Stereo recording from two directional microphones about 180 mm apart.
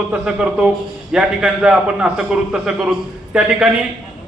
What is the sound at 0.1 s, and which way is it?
A man's voice, 5° right (ahead or behind).